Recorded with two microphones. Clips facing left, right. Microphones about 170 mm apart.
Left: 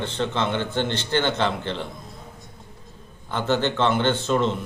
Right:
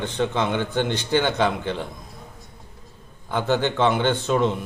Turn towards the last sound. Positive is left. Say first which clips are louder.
# right 1 dB
turn(degrees=-15)  # may be behind; listen again after turning